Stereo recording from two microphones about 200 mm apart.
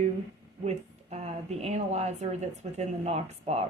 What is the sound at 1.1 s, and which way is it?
Speech, 30° right (ahead or behind).